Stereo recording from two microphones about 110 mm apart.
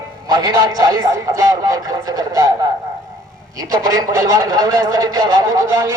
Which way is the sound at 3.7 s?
35° right (ahead or behind).